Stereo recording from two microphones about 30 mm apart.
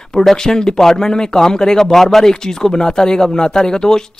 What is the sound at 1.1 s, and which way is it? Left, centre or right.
Speech, left.